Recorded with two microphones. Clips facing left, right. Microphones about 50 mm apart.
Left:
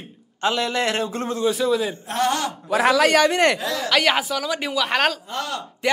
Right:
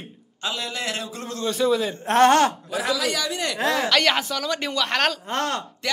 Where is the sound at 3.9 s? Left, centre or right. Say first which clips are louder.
Left 1 dB; centre.